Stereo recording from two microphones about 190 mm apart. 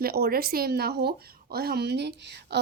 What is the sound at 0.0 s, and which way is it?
A woman's voice, 55° right (ahead or behind).